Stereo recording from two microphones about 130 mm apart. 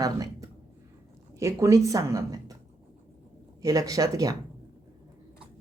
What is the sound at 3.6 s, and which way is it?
Speech, 30° right (ahead or behind).